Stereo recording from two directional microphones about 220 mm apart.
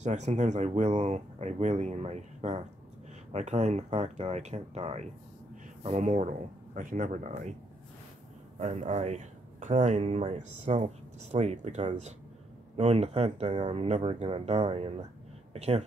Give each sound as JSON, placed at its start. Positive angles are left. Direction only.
{"t": 0.0, "sound": "speech", "side_deg": -30}
{"t": 8.5, "sound": "speech", "side_deg": -30}